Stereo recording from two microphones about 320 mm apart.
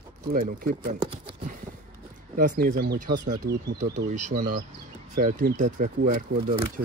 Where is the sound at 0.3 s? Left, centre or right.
Right.